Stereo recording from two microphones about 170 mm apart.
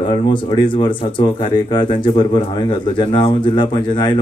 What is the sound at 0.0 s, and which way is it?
Speech, 30° left (ahead or behind).